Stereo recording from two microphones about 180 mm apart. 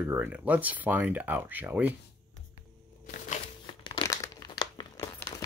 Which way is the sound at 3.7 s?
25° left (ahead or behind).